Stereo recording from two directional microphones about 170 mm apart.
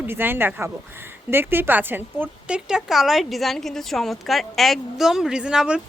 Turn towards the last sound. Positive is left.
turn(degrees=-5)  # may be behind; listen again after turning